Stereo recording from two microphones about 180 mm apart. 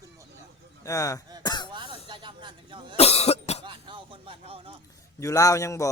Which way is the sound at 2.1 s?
25° right (ahead or behind).